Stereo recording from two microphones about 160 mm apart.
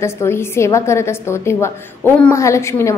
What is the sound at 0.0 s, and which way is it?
A woman's voice, 15° left (ahead or behind).